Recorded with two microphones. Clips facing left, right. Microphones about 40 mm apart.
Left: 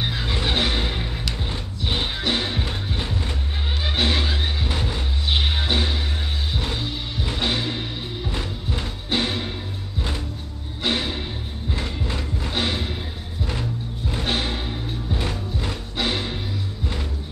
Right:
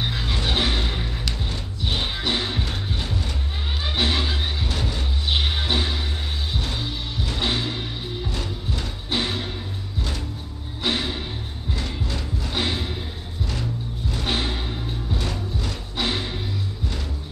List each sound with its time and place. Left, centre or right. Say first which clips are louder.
0.0 s vehicle: left 1 dB; centre
1.5 s music: left 2 dB; centre
3.8 s music: left 1 dB; centre
8.3 s music: left 1 dB; left
9.1 s music: left 2 dB; centre
10.8 s music: left 1 dB; centre
11.7 s music: left 1 dB; left
14.2 s music: left 1 dB; centre
15.1 s music: left 1 dB; left
16.0 s music: left 1 dB; centre